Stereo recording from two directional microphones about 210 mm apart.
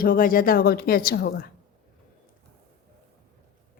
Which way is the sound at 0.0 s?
40° left (ahead or behind).